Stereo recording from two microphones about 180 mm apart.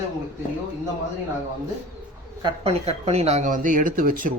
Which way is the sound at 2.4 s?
35° right (ahead or behind).